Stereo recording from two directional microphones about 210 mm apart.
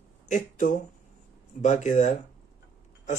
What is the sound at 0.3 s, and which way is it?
Speech, 35° left (ahead or behind).